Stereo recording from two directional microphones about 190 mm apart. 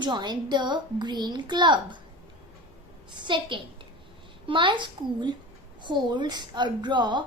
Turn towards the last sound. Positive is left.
turn(degrees=-25)  # may be behind; listen again after turning